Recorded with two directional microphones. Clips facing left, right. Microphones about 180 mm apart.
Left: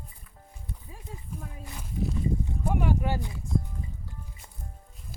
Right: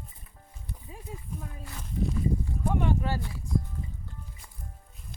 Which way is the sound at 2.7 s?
10° left (ahead or behind).